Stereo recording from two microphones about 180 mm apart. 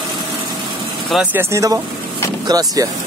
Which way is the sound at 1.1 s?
10° right (ahead or behind).